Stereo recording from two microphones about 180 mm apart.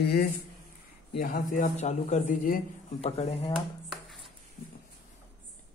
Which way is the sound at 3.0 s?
35° left (ahead or behind).